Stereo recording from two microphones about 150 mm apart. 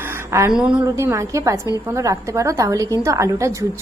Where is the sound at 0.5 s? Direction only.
5° right (ahead or behind).